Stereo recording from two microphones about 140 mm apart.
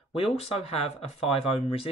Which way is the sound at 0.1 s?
45° left (ahead or behind).